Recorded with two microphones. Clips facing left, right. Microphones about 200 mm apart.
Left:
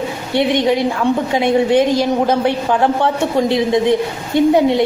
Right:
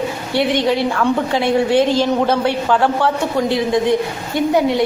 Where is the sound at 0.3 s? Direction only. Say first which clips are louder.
Left 2 dB; 20° left (ahead or behind).